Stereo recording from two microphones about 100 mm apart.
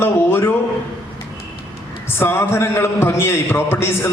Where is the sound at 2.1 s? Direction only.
25° left (ahead or behind).